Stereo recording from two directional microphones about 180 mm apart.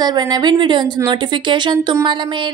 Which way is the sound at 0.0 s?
25° right (ahead or behind).